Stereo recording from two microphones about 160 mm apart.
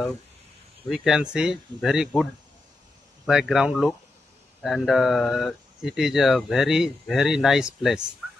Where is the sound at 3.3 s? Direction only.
5° right (ahead or behind).